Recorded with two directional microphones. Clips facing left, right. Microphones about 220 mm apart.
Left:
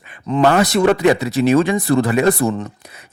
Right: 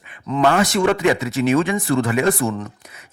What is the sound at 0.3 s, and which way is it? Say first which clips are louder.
Speech: left 3 dB; 35° left (ahead or behind).